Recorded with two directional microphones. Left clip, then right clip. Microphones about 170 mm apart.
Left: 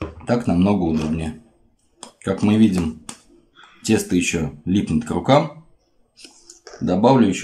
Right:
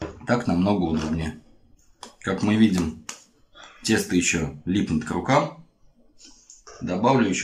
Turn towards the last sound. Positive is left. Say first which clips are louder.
# left 5 dB
turn(degrees=30)  # may be behind; listen again after turning